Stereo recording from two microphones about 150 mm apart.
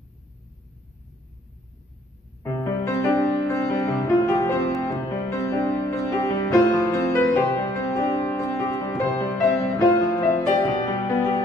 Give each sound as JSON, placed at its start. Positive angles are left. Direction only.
{"t": 2.4, "sound": "music", "side_deg": 20}